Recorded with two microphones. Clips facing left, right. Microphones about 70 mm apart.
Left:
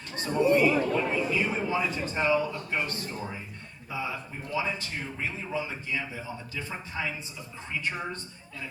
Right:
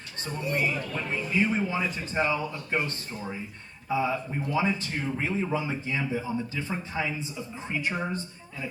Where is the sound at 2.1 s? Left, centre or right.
Right.